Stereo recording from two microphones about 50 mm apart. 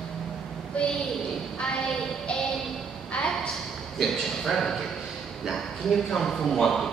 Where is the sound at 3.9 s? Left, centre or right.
Centre.